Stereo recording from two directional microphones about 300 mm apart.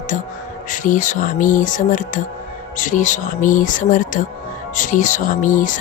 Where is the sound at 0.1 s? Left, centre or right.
Left.